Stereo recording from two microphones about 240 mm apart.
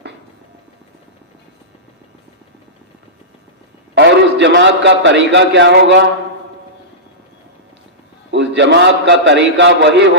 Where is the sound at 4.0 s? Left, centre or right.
Right.